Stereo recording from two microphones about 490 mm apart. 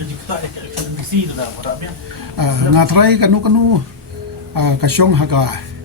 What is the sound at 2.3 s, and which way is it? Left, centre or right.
Speech, right.